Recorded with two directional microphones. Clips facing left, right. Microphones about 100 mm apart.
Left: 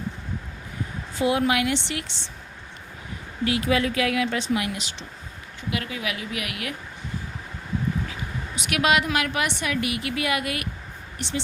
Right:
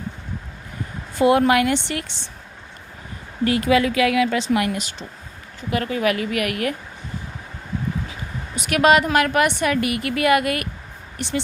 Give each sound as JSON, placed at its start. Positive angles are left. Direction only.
{"t": 1.2, "sound": "a woman's voice", "side_deg": -55}
{"t": 3.4, "sound": "a woman's voice", "side_deg": -45}
{"t": 3.7, "sound": "speech", "side_deg": -90}
{"t": 4.6, "sound": "a woman's voice", "side_deg": -50}
{"t": 8.5, "sound": "a woman's voice", "side_deg": -40}